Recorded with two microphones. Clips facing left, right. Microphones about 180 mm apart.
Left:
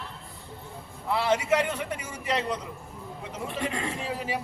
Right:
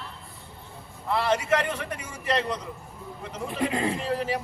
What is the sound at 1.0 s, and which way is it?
A man's voice, 5° left (ahead or behind).